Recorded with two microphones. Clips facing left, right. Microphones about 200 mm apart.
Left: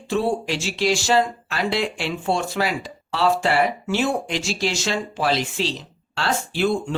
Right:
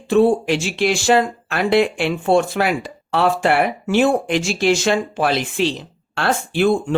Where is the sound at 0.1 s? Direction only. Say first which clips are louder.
Right 8 dB; 55° right (ahead or behind).